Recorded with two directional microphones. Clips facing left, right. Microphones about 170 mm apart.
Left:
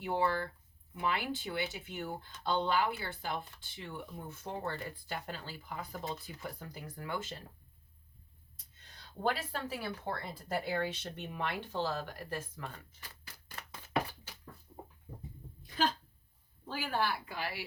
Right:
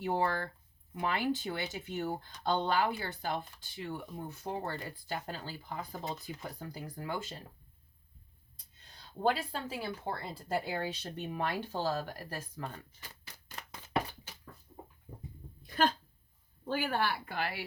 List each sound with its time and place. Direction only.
0.0 s speech: 40° right (ahead or behind)
9.2 s speech: 25° right (ahead or behind)
14.7 s a sound: centre (ahead or behind)
16.6 s a woman's voice: 55° right (ahead or behind)